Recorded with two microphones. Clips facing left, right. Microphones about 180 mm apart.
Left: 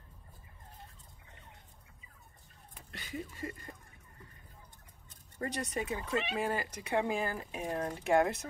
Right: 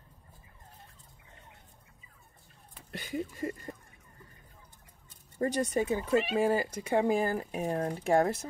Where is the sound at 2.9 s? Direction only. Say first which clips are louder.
Right 7 dB; 40° right (ahead or behind).